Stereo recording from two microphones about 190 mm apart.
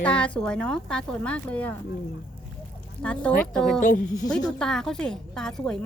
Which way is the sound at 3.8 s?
45° left (ahead or behind).